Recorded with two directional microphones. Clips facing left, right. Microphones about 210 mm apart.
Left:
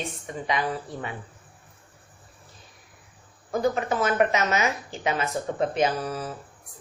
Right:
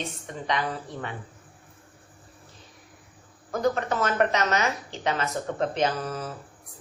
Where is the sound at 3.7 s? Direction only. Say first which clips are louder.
Left 2 dB; 10° left (ahead or behind).